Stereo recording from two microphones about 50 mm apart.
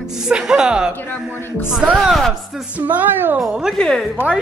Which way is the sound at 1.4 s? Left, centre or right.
Left.